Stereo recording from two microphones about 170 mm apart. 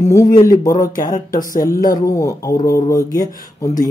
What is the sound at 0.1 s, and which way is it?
Speech, 20° left (ahead or behind).